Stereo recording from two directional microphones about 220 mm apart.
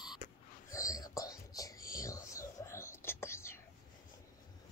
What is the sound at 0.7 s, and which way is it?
Whispering, 15° left (ahead or behind).